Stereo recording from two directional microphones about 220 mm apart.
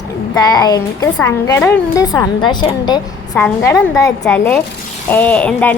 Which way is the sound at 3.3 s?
5° left (ahead or behind).